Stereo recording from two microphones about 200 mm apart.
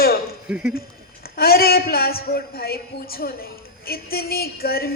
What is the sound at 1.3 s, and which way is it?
Speech, 50° left (ahead or behind).